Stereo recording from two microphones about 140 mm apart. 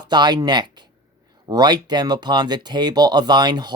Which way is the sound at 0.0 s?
30° right (ahead or behind).